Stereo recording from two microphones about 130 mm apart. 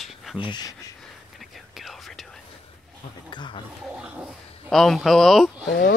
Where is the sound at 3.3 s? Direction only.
35° left (ahead or behind).